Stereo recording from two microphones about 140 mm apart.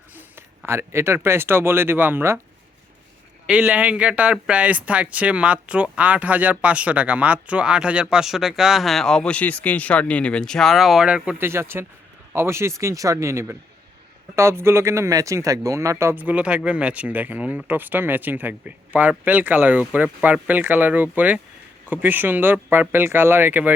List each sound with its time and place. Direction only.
0.2 s speech: 15° right (ahead or behind)
3.4 s a man's voice: 10° right (ahead or behind)